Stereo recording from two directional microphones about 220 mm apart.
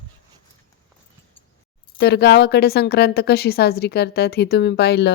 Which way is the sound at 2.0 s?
50° left (ahead or behind).